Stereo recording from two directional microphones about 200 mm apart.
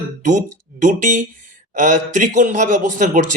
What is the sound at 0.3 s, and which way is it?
Speech, 40° right (ahead or behind).